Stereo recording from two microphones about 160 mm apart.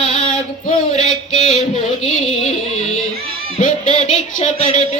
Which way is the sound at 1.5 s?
40° left (ahead or behind).